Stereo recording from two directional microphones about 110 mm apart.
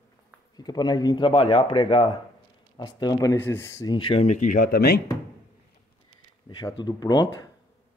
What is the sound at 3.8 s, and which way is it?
Speech, 50° left (ahead or behind).